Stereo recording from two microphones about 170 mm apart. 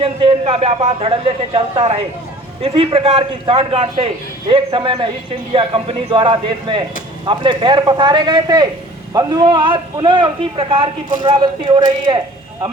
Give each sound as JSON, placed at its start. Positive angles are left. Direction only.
{"t": 0.0, "sound": "a man's voice", "side_deg": -30}